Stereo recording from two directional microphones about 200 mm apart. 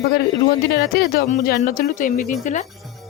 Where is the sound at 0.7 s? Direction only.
50° left (ahead or behind).